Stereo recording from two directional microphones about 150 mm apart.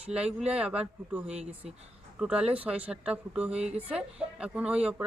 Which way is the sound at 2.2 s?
5° right (ahead or behind).